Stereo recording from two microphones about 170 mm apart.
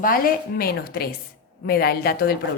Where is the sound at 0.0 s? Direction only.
55° left (ahead or behind).